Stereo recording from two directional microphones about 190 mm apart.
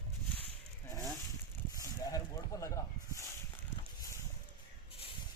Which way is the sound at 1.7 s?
20° left (ahead or behind).